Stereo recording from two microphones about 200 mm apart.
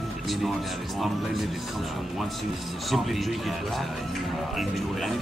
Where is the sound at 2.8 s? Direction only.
Centre (ahead or behind).